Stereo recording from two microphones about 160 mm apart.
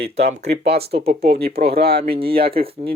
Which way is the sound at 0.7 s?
80° right.